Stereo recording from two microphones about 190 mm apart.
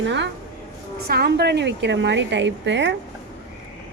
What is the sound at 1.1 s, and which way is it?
Speech, 60° right (ahead or behind).